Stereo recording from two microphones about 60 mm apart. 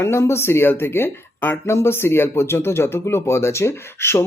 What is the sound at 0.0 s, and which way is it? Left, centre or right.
Speech, left.